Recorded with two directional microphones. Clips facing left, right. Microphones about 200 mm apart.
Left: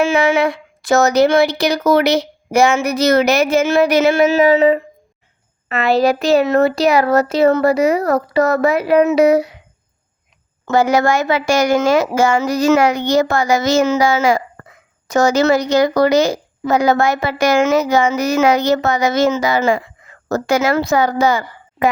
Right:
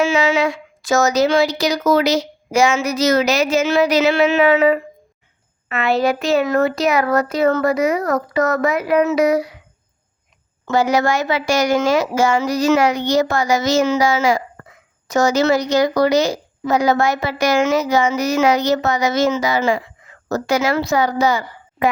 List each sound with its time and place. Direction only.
0.0 s speech: 55° left (ahead or behind); by 9.6 s 25° left (ahead or behind)
10.7 s a woman's voice: 50° left (ahead or behind)